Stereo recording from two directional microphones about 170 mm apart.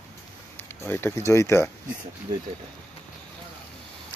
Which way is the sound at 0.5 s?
15° left (ahead or behind).